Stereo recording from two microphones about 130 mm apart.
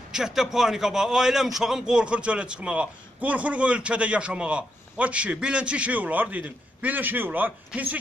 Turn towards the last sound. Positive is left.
turn(degrees=-15)  # may be behind; listen again after turning